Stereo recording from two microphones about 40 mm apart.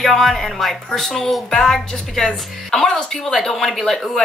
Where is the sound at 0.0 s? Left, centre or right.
Centre.